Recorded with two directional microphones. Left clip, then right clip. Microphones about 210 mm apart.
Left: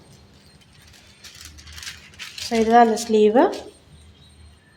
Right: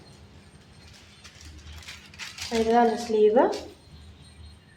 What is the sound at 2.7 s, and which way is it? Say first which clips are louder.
Speech: left 7 dB; 55° left (ahead or behind).